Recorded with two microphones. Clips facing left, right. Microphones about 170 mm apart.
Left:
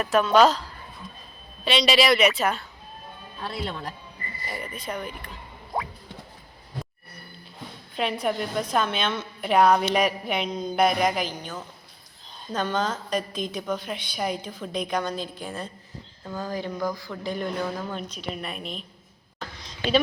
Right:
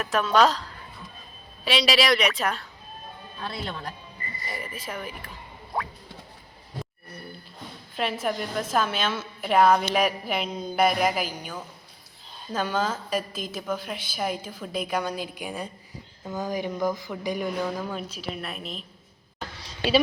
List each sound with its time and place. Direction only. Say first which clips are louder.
0.0 s a woman's voice: left 3 dB; centre (ahead or behind)
1.6 s a woman's voice: left 2 dB; 5° right (ahead or behind)
4.4 s a woman's voice: left 2 dB; centre (ahead or behind)
7.9 s a woman's voice: left 2 dB; centre (ahead or behind)
19.4 s a sound: right 2 dB; 5° right (ahead or behind)